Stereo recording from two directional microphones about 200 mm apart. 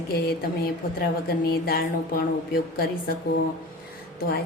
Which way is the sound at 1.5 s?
50° left (ahead or behind).